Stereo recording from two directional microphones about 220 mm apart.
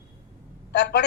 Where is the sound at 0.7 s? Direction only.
50° left (ahead or behind).